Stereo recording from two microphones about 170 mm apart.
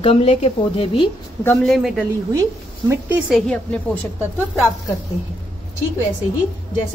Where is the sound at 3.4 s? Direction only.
5° left (ahead or behind).